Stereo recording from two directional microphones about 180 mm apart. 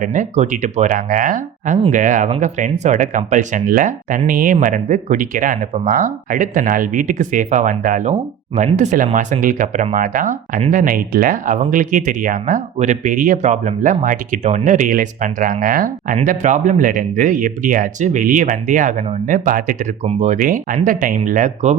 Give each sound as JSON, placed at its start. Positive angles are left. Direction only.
{"t": 0.0, "sound": "speech", "side_deg": -40}
{"t": 4.5, "sound": "speech", "side_deg": -40}